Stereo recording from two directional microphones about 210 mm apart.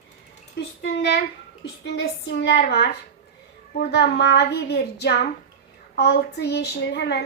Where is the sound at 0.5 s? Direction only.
55° left (ahead or behind).